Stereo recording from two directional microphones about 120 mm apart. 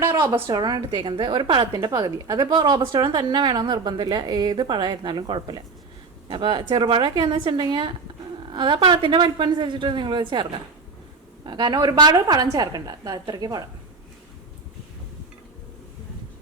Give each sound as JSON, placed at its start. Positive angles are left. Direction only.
{"t": 0.0, "sound": "a woman's voice", "side_deg": -25}
{"t": 11.4, "sound": "a woman's voice", "side_deg": -40}